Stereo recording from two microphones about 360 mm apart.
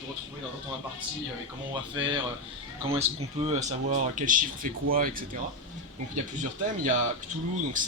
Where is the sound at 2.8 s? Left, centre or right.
Centre.